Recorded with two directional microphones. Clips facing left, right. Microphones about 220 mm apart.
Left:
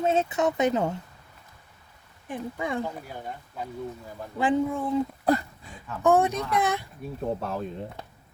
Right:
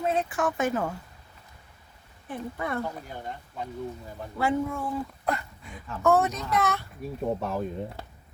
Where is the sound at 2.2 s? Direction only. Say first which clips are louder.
Left 1 dB; 15° left (ahead or behind).